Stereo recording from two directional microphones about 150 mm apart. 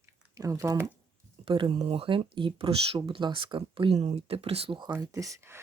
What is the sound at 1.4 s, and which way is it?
Speech, 35° right (ahead or behind).